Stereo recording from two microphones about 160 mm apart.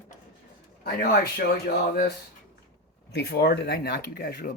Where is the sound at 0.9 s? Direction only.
75° left (ahead or behind).